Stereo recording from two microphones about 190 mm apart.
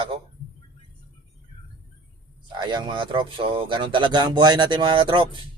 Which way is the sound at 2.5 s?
20° right (ahead or behind).